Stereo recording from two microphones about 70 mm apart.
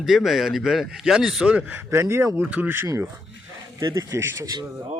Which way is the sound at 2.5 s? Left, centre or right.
Right.